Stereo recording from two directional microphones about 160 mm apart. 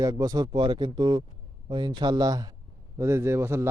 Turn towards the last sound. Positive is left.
turn(degrees=-15)  # may be behind; listen again after turning